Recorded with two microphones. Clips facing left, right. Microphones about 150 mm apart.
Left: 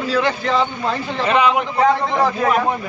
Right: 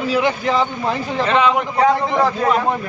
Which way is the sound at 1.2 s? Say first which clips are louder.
Even; 10° left (ahead or behind).